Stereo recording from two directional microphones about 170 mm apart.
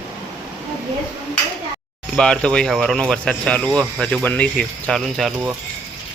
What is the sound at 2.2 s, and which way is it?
Speech, 5° left (ahead or behind).